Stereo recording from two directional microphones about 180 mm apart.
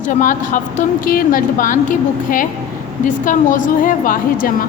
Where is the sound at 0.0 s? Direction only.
45° left (ahead or behind).